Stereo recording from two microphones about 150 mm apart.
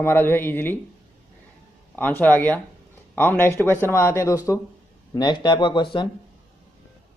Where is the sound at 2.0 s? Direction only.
10° left (ahead or behind); by 5.9 s 30° left (ahead or behind).